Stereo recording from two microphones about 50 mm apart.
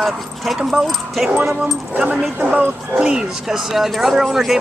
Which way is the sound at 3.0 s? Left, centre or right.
Centre.